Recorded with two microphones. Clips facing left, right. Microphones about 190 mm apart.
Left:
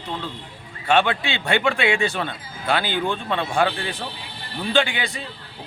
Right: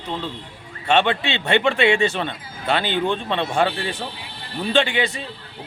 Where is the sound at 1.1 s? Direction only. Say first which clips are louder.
Right 3 dB; 5° left (ahead or behind).